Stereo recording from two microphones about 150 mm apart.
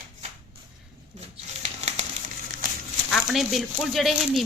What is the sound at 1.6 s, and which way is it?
Crumpling, 45° right (ahead or behind).